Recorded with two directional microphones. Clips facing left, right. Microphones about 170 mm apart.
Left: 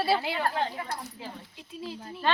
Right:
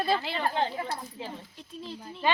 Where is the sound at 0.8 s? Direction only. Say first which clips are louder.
Right 2 dB; 30° right (ahead or behind).